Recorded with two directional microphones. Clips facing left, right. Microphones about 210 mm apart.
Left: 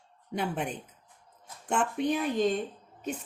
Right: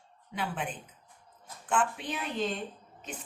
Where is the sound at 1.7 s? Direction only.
45° left (ahead or behind).